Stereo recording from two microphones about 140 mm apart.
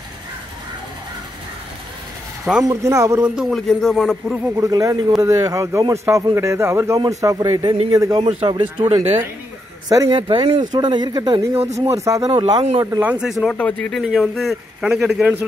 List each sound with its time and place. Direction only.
2.7 s speech: 20° right (ahead or behind)
3.2 s speech: 5° right (ahead or behind)
4.6 s speech: 25° right (ahead or behind)
9.8 s speech: 25° right (ahead or behind)
10.1 s speech: 35° right (ahead or behind)
11.6 s speech: 45° right (ahead or behind)
11.9 s speech: 20° right (ahead or behind)
13.0 s speech: 10° right (ahead or behind)
13.5 s speech: 10° left (ahead or behind)